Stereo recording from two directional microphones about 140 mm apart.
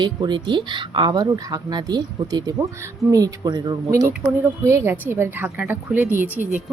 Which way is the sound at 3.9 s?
20° right (ahead or behind).